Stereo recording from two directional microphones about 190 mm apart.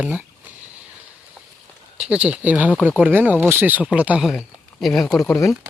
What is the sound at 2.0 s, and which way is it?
Speech, 5° right (ahead or behind).